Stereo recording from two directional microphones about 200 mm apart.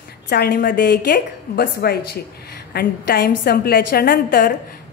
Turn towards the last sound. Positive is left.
turn(degrees=50)  # may be behind; listen again after turning